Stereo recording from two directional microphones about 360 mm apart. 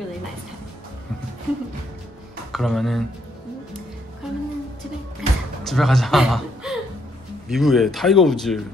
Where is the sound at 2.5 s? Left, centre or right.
Centre.